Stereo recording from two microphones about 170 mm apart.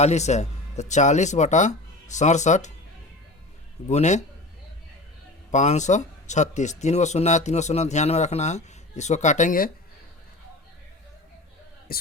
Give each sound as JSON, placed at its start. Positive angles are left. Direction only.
{"t": 0.0, "sound": "speech", "side_deg": 40}
{"t": 3.8, "sound": "speech", "side_deg": 45}
{"t": 5.5, "sound": "speech", "side_deg": 45}
{"t": 11.9, "sound": "speech", "side_deg": 60}